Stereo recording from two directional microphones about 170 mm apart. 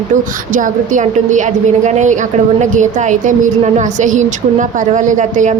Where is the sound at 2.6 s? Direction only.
45° right (ahead or behind).